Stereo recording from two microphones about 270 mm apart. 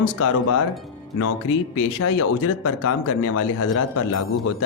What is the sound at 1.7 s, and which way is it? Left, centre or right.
Speech, left.